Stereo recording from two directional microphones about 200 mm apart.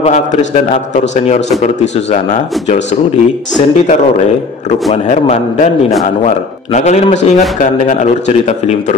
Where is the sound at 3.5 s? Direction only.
35° left (ahead or behind).